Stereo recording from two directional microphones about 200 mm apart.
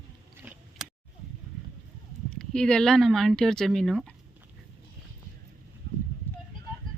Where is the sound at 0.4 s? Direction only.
10° right (ahead or behind).